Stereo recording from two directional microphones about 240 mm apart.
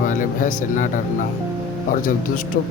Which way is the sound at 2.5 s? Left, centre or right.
Left.